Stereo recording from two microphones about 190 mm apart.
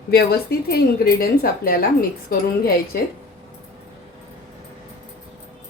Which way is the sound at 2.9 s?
50° left (ahead or behind).